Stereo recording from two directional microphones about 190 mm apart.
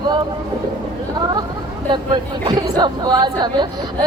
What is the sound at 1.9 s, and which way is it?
Speech, 20° right (ahead or behind).